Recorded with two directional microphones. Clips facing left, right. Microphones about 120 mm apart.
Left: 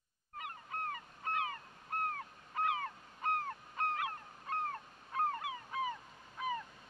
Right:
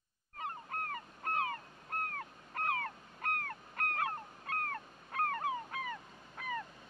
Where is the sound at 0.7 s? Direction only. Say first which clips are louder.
Even; 50° right (ahead or behind).